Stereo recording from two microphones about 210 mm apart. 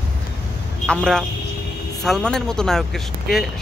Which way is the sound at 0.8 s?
5° left (ahead or behind).